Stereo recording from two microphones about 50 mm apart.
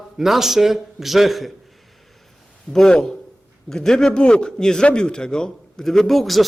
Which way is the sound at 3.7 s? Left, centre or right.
Centre.